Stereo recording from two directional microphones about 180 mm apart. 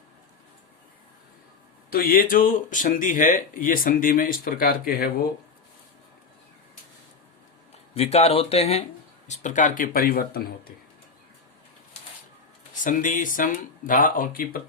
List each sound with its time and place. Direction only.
1.9 s speech: 55° left (ahead or behind)
7.9 s speech: 35° left (ahead or behind); by 10.7 s 55° left (ahead or behind)
12.7 s speech: 45° left (ahead or behind)